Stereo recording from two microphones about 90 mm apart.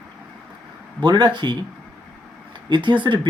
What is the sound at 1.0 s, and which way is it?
Speech, 55° right (ahead or behind).